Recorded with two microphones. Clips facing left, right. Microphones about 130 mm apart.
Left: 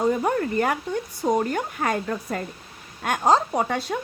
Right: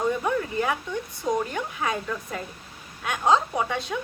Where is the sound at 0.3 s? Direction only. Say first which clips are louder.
Left 3 dB; 55° left (ahead or behind).